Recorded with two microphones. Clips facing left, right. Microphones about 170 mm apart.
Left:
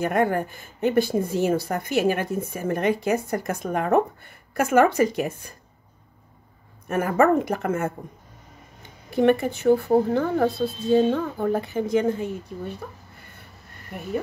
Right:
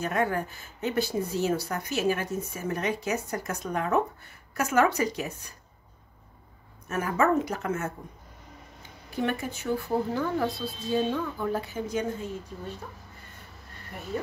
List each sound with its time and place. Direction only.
0.0 s speech: 55° left (ahead or behind)
6.9 s speech: 55° left (ahead or behind)
9.1 s speech: 60° left (ahead or behind)